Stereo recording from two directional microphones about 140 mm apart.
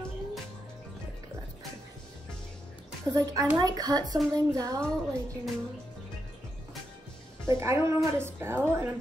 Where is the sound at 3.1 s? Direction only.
25° right (ahead or behind).